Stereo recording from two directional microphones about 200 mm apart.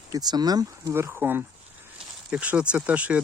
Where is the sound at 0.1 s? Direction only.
20° right (ahead or behind).